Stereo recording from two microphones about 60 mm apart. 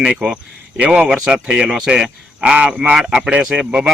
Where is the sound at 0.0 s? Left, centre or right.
Centre.